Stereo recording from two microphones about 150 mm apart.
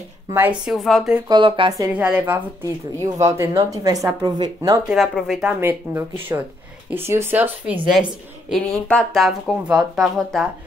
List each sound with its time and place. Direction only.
0.3 s speech: 15° right (ahead or behind)
0.7 s a woman's voice: centre (ahead or behind)
1.3 s speech: 30° right (ahead or behind)
2.0 s a woman's voice: 10° right (ahead or behind); by 4.7 s 25° right (ahead or behind)
4.8 s a woman's voice: centre (ahead or behind)
5.6 s a woman's voice: 15° right (ahead or behind)